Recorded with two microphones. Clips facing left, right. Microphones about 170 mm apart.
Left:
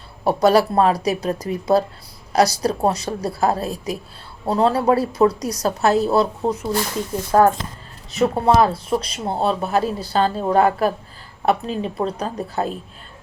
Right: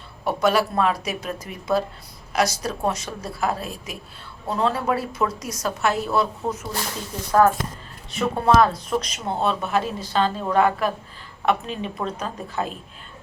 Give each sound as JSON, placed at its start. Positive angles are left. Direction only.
{"t": 0.3, "sound": "speech", "side_deg": 35}